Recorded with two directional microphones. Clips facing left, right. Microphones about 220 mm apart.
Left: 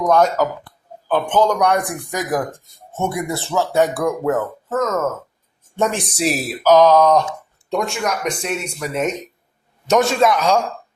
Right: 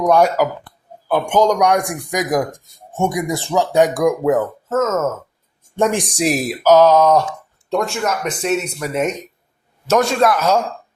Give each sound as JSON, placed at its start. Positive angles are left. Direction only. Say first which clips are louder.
{"t": 0.0, "sound": "a man's voice", "louder": "right 2 dB", "side_deg": -15}